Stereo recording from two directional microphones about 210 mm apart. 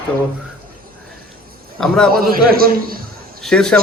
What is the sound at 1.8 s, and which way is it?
Speech, centre (ahead or behind).